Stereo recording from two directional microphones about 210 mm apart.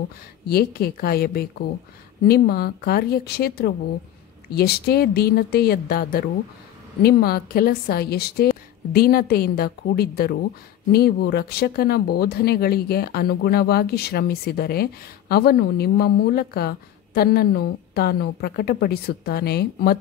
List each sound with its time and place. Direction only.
0.5 s speech: 50° left (ahead or behind)